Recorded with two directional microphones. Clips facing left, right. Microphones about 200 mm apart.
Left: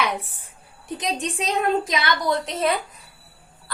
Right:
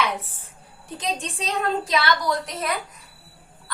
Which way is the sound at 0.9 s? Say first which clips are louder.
Left 2 dB; 15° left (ahead or behind).